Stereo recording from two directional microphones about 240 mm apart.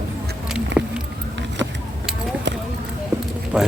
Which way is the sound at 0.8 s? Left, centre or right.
Centre.